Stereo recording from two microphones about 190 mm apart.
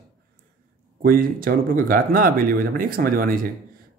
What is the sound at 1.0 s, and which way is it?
Speech, 50° right (ahead or behind).